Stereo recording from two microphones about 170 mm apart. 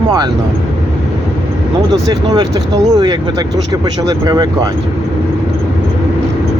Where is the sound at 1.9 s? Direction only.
25° right (ahead or behind).